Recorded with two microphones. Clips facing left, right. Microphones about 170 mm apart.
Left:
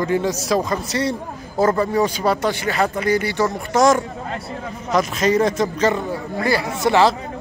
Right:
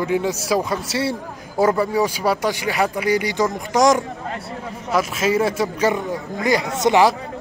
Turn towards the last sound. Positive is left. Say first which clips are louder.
# even
turn(degrees=-20)  # may be behind; listen again after turning